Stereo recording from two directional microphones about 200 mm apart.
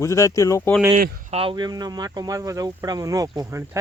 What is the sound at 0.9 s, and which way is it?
Speech, 50° right (ahead or behind).